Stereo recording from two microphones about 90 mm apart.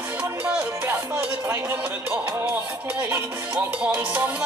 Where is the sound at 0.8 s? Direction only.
25° right (ahead or behind).